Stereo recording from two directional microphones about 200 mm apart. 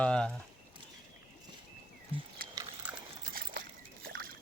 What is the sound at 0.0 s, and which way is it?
Speech, 5° left (ahead or behind).